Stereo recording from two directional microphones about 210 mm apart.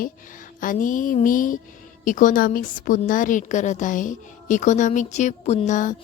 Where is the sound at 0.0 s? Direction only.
40° left (ahead or behind).